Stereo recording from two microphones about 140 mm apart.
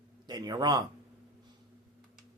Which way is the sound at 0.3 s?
30° right (ahead or behind).